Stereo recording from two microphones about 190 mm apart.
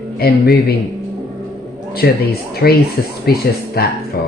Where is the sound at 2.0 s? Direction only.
60° left (ahead or behind).